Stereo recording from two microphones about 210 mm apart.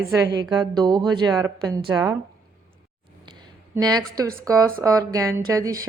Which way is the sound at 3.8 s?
20° right (ahead or behind).